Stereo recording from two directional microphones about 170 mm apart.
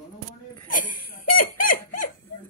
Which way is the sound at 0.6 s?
50° left (ahead or behind).